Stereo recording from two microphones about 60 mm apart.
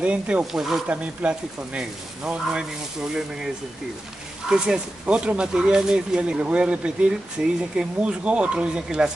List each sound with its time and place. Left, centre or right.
0.0 s speech: centre
0.5 s speech: centre
0.8 s speech: right
4.5 s speech: centre